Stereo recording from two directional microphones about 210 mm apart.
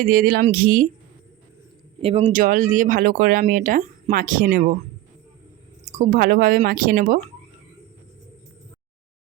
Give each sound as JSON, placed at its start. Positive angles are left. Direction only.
{"t": 0.0, "sound": "speech", "side_deg": -45}
{"t": 2.0, "sound": "speech", "side_deg": -30}
{"t": 5.8, "sound": "speech", "side_deg": -40}